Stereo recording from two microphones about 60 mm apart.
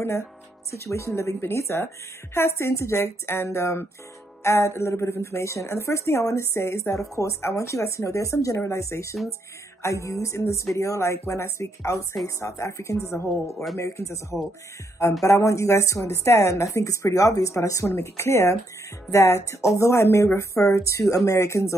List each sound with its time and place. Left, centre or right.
0.0 s a woman's voice: left
16.7 s a woman's voice: left
20.6 s speech: left